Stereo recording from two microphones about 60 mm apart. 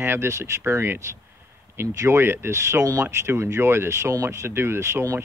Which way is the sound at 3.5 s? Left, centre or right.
Right.